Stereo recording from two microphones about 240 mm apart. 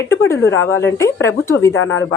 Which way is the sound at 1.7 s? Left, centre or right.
Left.